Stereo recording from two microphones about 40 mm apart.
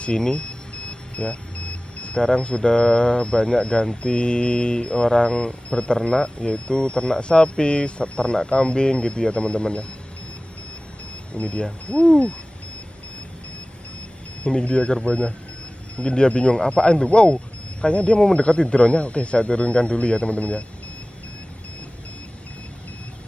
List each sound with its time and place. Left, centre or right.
0.0 s speech: left
11.3 s speech: left
14.4 s speech: left